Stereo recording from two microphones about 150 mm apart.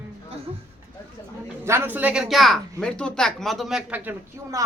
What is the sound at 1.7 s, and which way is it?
Speech, 15° right (ahead or behind).